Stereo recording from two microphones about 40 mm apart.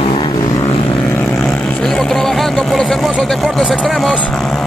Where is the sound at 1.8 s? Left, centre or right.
Centre.